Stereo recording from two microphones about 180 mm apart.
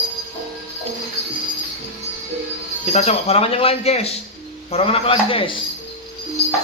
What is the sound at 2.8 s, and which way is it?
Speech, 40° left (ahead or behind).